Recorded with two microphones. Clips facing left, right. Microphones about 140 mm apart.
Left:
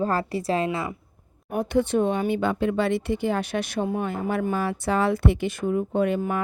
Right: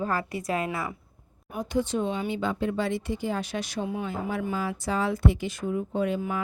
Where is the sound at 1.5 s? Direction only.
60° left (ahead or behind).